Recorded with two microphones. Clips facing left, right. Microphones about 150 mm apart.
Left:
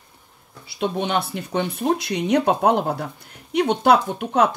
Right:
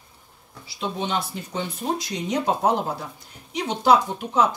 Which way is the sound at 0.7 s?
60° left (ahead or behind).